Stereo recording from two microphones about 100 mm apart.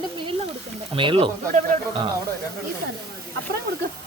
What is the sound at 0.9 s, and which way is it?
Speech, 60° right (ahead or behind).